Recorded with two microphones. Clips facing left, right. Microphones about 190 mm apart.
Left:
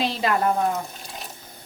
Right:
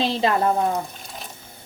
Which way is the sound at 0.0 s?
25° right (ahead or behind).